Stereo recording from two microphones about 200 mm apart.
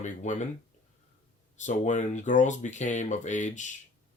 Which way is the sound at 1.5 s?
40° left (ahead or behind).